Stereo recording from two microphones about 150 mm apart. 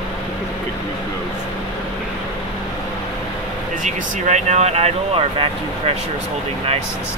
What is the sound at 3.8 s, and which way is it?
Speech, 50° right (ahead or behind).